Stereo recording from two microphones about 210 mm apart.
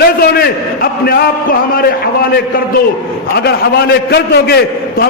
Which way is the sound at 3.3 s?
50° left (ahead or behind).